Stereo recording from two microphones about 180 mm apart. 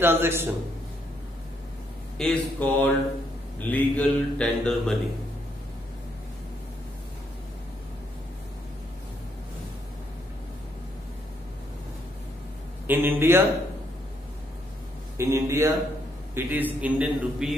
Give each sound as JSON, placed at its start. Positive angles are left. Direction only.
{"t": 0.0, "sound": "a man's voice", "side_deg": -10}
{"t": 2.1, "sound": "a man's voice", "side_deg": 5}
{"t": 12.8, "sound": "a man's voice", "side_deg": -10}
{"t": 15.1, "sound": "a man's voice", "side_deg": -15}